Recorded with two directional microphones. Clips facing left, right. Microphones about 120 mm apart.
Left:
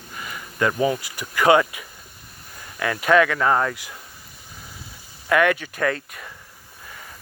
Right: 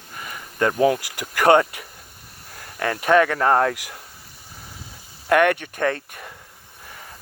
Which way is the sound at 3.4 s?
60° right (ahead or behind).